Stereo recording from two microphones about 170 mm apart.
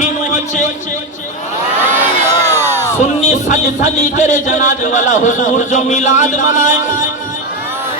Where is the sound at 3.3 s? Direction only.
45° left (ahead or behind).